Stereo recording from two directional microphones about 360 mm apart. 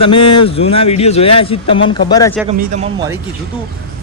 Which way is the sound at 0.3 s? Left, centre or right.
Centre.